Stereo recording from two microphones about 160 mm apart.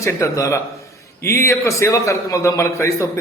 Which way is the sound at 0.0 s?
20° left (ahead or behind).